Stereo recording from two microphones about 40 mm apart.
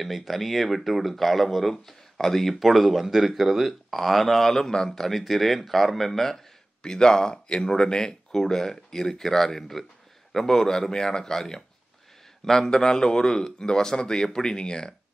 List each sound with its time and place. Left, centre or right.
0.0 s speech: centre
6.8 s speech: centre
8.3 s a man's voice: centre